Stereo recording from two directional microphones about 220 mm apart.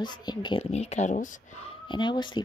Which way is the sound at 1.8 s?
20° left (ahead or behind).